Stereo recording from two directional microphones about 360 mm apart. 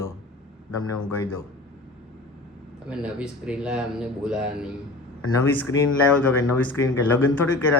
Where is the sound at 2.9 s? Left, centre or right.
Centre.